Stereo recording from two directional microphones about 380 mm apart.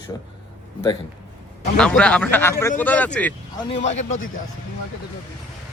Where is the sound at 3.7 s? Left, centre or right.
Centre.